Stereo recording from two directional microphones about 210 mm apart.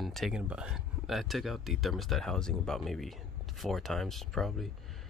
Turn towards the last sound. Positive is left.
turn(degrees=0)  # may be behind; listen again after turning